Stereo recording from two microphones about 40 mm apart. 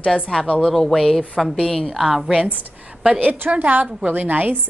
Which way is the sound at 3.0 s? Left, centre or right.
Right.